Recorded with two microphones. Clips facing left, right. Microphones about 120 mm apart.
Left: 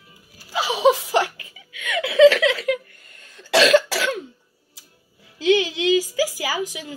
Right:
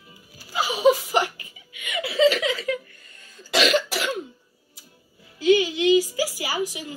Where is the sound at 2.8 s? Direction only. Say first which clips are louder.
Left 1 dB; 50° left (ahead or behind); by 4.2 s 90° left.